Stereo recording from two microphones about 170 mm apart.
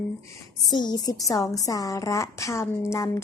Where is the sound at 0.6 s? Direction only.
25° left (ahead or behind).